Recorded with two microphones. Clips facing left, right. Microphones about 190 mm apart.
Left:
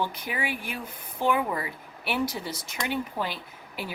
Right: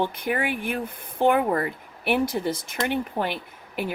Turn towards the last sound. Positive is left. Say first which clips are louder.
# right 7 dB
turn(degrees=-55)  # may be behind; listen again after turning